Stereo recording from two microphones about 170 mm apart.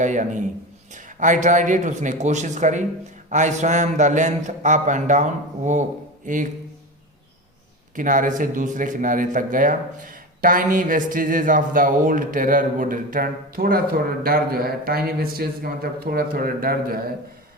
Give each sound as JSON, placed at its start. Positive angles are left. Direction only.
{"t": 0.0, "sound": "a man's voice", "side_deg": -45}
{"t": 7.9, "sound": "a man's voice", "side_deg": -50}